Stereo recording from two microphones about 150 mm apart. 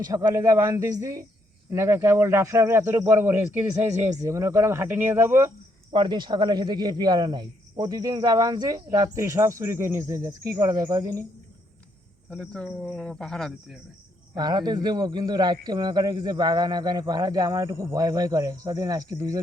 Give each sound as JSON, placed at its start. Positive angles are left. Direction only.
{"t": 0.1, "sound": "a man's voice", "side_deg": -20}
{"t": 5.9, "sound": "a man's voice", "side_deg": -30}
{"t": 12.3, "sound": "speech", "side_deg": 5}
{"t": 14.3, "sound": "a man's voice", "side_deg": -25}